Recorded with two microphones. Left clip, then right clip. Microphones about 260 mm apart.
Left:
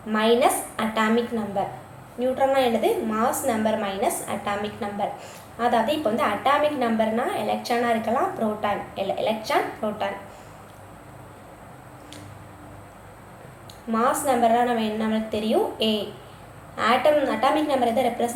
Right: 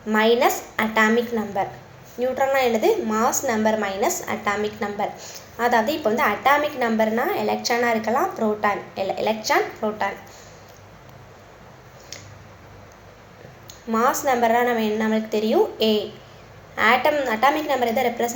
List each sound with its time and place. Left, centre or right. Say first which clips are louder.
0.1 s a woman's voice: right 2 dB; right
2.1 s a woman's voice: right 1 dB; right
13.9 s a woman's voice: right 2 dB; centre
17.2 s a woman's voice: right 2 dB; right